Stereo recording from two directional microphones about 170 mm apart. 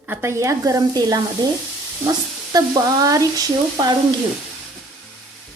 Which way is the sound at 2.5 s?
20° right (ahead or behind).